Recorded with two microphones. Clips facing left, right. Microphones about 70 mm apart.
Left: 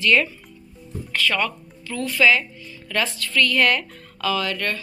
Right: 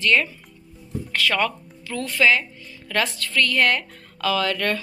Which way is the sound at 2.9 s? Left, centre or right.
Right.